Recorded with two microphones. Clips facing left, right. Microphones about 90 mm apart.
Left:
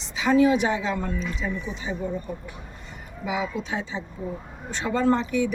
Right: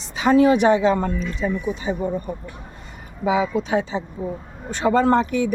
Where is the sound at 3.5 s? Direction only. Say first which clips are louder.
Right 8 dB; 65° right (ahead or behind).